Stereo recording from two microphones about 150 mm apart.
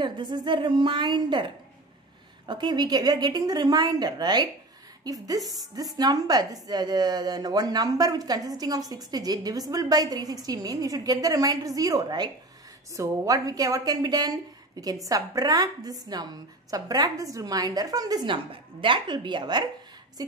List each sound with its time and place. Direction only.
0.0 s a woman's voice: 30° right (ahead or behind)